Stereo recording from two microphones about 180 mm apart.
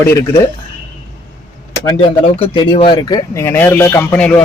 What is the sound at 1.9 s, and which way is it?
Speech, 30° left (ahead or behind).